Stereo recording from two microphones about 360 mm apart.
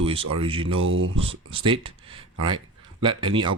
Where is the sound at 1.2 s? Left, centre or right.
Centre.